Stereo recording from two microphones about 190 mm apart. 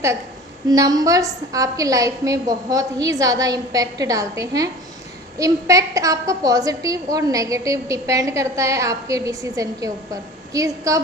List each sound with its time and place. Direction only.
0.7 s a woman's voice: 20° right (ahead or behind)